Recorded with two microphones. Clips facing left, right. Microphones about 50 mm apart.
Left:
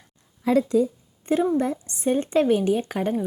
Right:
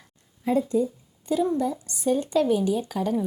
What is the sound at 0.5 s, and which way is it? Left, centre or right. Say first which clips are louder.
Speech: left 3 dB; left.